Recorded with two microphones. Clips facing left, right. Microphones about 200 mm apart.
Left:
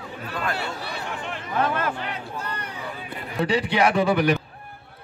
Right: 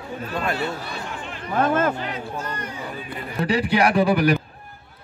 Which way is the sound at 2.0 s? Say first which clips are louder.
Right 3 dB; 60° left (ahead or behind).